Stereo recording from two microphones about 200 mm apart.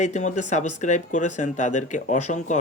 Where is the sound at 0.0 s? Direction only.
35° left (ahead or behind).